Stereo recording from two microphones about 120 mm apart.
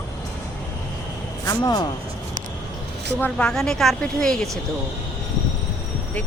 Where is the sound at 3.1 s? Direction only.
10° left (ahead or behind).